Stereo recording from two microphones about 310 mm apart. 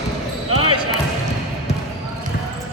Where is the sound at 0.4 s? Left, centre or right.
Right.